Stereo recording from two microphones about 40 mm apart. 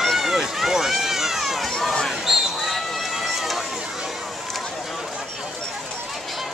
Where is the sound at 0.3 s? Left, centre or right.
Centre.